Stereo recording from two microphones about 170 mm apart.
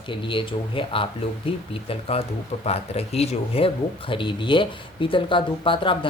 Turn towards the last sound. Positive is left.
turn(degrees=30)  # may be behind; listen again after turning